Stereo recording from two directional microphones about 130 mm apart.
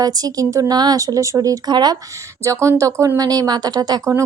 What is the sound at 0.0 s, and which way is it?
Speech, 30° right (ahead or behind).